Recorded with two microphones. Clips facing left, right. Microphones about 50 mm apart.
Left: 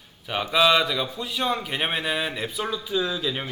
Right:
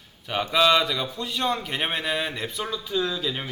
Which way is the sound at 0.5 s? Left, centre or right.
Centre.